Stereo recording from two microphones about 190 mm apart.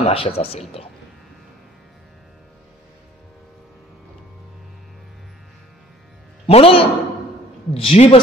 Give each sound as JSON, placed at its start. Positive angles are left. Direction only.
{"t": 0.0, "sound": "speech", "side_deg": 30}
{"t": 6.4, "sound": "a man's voice", "side_deg": 30}